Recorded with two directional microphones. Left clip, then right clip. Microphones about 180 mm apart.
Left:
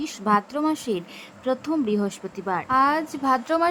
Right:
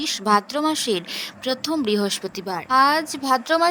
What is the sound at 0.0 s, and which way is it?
A woman's voice, 45° right (ahead or behind).